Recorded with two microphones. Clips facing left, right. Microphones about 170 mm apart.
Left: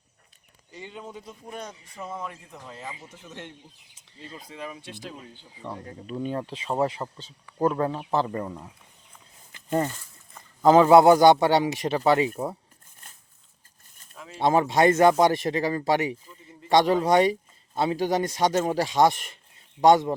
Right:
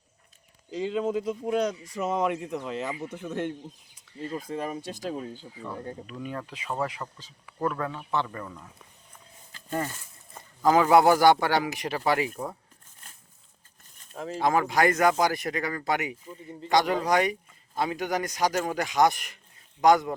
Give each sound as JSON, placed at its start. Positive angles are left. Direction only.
{"t": 0.7, "sound": "speech", "side_deg": -90}
{"t": 1.9, "sound": "speech", "side_deg": -80}
{"t": 5.5, "sound": "speech", "side_deg": 25}
{"t": 9.5, "sound": "a sound", "side_deg": 20}
{"t": 10.6, "sound": "speech", "side_deg": 25}
{"t": 14.1, "sound": "speech", "side_deg": -40}
{"t": 14.3, "sound": "speech", "side_deg": 25}
{"t": 16.3, "sound": "speech", "side_deg": -30}
{"t": 16.6, "sound": "speech", "side_deg": 30}